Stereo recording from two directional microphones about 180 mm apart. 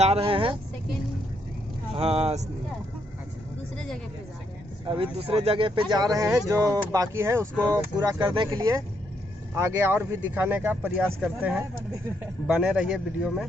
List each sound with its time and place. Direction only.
0.0 s speech: 35° right (ahead or behind)
2.0 s speech: 35° right (ahead or behind)
3.8 s a sound: 5° left (ahead or behind)
4.9 s a man's voice: 30° right (ahead or behind); by 13.4 s 5° right (ahead or behind)